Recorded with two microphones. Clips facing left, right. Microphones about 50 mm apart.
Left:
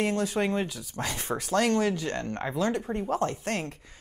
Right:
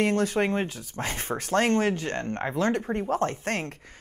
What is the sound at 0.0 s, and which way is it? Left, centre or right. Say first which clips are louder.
Speech: right 3 dB; right.